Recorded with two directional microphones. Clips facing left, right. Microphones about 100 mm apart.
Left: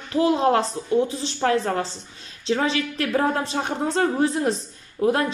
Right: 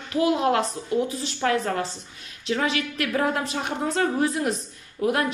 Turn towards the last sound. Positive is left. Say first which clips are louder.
# left 3 dB
turn(degrees=30)  # may be behind; listen again after turning